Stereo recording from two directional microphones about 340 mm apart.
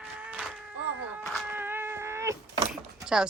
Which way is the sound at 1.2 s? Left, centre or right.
Centre.